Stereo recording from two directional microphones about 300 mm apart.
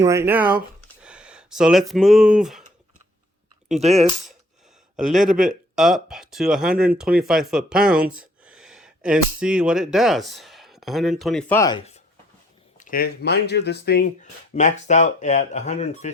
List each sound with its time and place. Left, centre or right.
0.0 s speech: centre
3.8 s speech: centre
12.7 s speech: left